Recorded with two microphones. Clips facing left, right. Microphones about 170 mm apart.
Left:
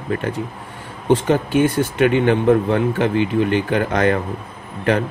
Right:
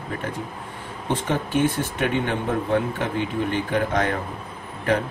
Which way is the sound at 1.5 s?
80° left.